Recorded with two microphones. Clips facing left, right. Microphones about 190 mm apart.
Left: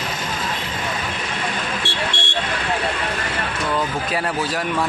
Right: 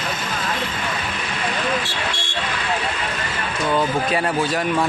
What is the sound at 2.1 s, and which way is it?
Vehicle, 25° left (ahead or behind).